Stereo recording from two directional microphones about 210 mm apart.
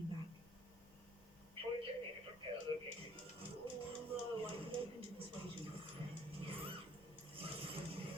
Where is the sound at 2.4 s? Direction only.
25° right (ahead or behind).